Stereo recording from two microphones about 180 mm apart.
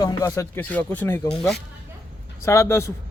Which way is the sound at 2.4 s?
15° left (ahead or behind).